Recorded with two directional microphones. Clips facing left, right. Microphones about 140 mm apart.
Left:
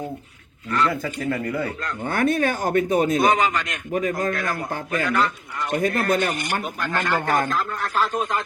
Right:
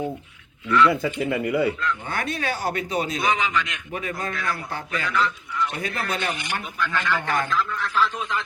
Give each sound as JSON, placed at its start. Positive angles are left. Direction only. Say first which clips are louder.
{"t": 0.7, "sound": "speech", "louder": "right 4 dB", "side_deg": 45}
{"t": 1.0, "sound": "speech", "louder": "right 1 dB", "side_deg": -10}
{"t": 1.8, "sound": "speech", "louder": "left 5 dB", "side_deg": 45}